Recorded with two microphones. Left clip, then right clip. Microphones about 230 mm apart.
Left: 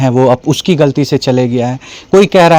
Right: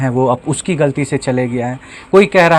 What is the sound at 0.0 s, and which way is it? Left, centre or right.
Speech, left.